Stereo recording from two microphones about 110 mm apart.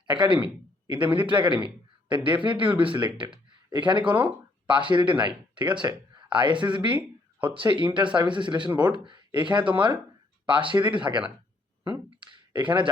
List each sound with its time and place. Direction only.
0.1 s speech: 45° right (ahead or behind)